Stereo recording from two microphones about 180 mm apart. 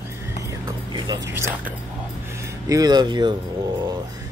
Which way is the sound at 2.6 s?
20° right (ahead or behind).